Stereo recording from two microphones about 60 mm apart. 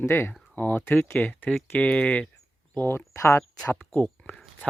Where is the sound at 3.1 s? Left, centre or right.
Left.